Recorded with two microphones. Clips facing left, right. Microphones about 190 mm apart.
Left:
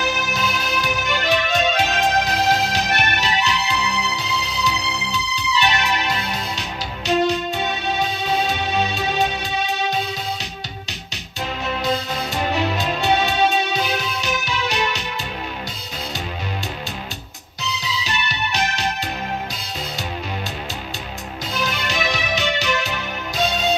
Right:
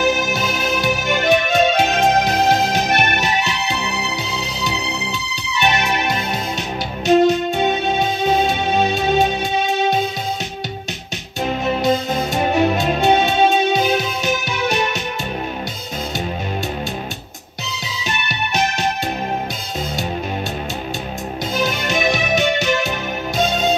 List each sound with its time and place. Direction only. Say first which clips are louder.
0.0 s music: right 6 dB; 50° right (ahead or behind)
11.6 s music: right 5 dB; 50° right (ahead or behind)
17.8 s music: right 2 dB; 50° right (ahead or behind)
21.5 s music: right 4 dB; 50° right (ahead or behind)